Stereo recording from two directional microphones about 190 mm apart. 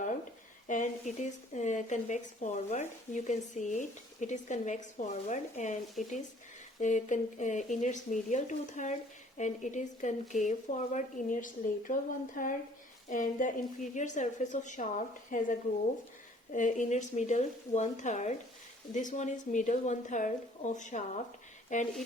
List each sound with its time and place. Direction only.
0.7 s speech: 40° left (ahead or behind)
6.0 s speech: centre (ahead or behind)
6.7 s a woman's voice: 40° left (ahead or behind)
16.6 s speech: 40° left (ahead or behind)